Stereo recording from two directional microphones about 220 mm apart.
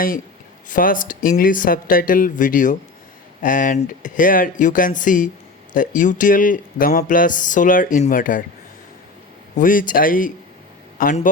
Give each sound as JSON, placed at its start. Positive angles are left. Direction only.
{"t": 0.7, "sound": "speech", "side_deg": 40}
{"t": 9.6, "sound": "a man's voice", "side_deg": 40}